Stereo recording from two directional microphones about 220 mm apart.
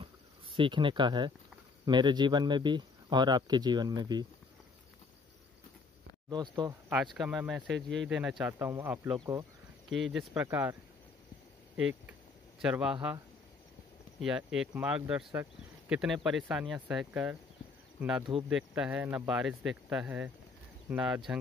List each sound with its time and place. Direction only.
0.6 s speech: 20° right (ahead or behind)
6.3 s speech: 20° right (ahead or behind)
6.9 s speech: 5° right (ahead or behind)
7.7 s speech: 55° right (ahead or behind)
8.1 s speech: 5° right (ahead or behind)
9.8 s speech: centre (ahead or behind)
11.8 s speech: 5° right (ahead or behind)
14.2 s speech: centre (ahead or behind)
18.5 s speech: 5° right (ahead or behind)